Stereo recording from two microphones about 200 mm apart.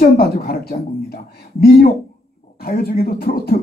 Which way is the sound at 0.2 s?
50° left (ahead or behind).